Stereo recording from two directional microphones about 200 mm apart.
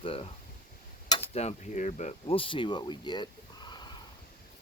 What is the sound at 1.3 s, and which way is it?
Speech, 30° left (ahead or behind).